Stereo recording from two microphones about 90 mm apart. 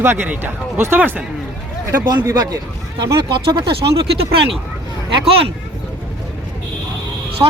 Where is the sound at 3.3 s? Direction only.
60° right (ahead or behind).